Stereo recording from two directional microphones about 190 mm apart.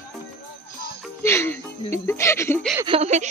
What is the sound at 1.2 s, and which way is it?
A woman's voice, 15° left (ahead or behind).